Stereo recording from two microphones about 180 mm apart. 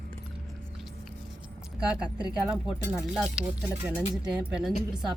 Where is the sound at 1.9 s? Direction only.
5° right (ahead or behind).